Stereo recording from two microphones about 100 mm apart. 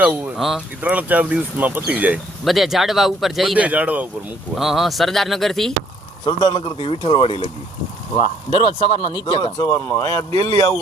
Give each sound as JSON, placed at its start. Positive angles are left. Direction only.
{"t": 0.0, "sound": "speech", "side_deg": -15}
{"t": 0.3, "sound": "speech", "side_deg": 0}
{"t": 0.8, "sound": "speech", "side_deg": -15}
{"t": 2.4, "sound": "speech", "side_deg": 0}
{"t": 3.6, "sound": "speech", "side_deg": -15}
{"t": 4.5, "sound": "speech", "side_deg": 0}
{"t": 6.2, "sound": "speech", "side_deg": 45}
{"t": 9.6, "sound": "speech", "side_deg": 30}